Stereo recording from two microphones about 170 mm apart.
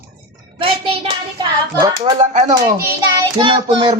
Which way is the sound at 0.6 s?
30° right (ahead or behind).